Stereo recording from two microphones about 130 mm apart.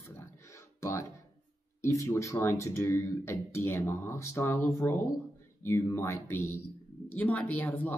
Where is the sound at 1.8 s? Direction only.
25° left (ahead or behind).